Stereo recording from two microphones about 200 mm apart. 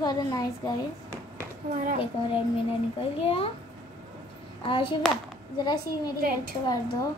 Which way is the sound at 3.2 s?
30° left (ahead or behind).